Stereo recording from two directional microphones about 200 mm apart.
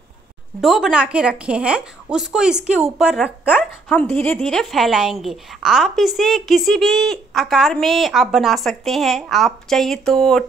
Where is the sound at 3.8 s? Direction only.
10° left (ahead or behind).